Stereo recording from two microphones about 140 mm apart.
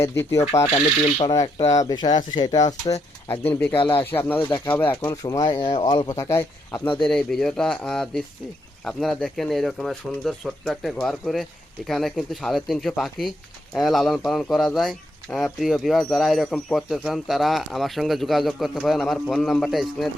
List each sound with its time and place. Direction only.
0.0 s speech: 20° left (ahead or behind)
0.4 s speech: 45° left (ahead or behind)
1.2 s speech: 30° left (ahead or behind)
3.2 s speech: 15° left (ahead or behind)
4.4 s speech: 30° left (ahead or behind)
4.7 s speech: 15° left (ahead or behind)
7.0 s speech: 5° left (ahead or behind)